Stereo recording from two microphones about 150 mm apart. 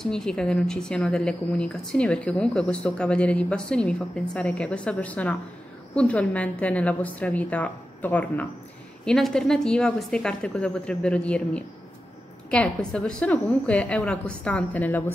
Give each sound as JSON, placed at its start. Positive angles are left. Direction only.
{"t": 0.0, "sound": "a woman's voice", "side_deg": 5}